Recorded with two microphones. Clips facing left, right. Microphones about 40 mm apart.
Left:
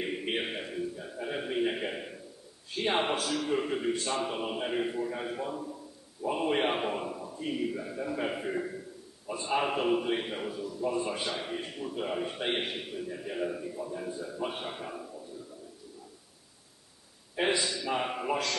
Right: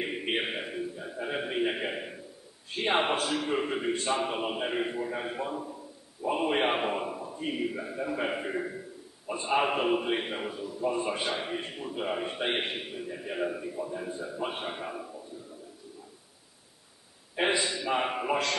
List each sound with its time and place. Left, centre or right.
0.0 s a sound: centre
2.7 s a man's voice: centre
17.4 s a man's voice: centre